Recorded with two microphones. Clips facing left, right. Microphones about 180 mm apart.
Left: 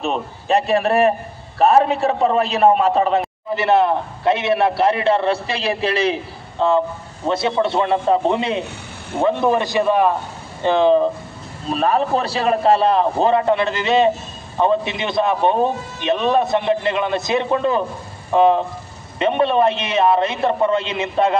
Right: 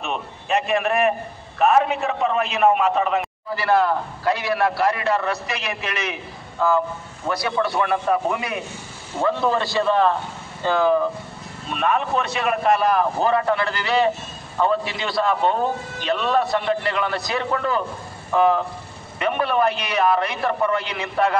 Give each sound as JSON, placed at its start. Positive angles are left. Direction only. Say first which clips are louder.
{"t": 0.0, "sound": "a man's voice", "louder": "left 6 dB", "side_deg": 35}
{"t": 3.4, "sound": "a man's voice", "louder": "left 3 dB", "side_deg": 20}
{"t": 11.7, "sound": "a man's voice", "louder": "left 4 dB", "side_deg": 35}